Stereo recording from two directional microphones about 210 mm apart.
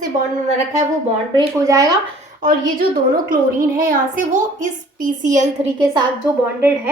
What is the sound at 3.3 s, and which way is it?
Child singing, 40° right (ahead or behind).